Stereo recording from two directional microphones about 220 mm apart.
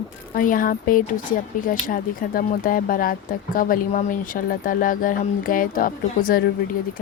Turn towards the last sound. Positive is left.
turn(degrees=40)  # may be behind; listen again after turning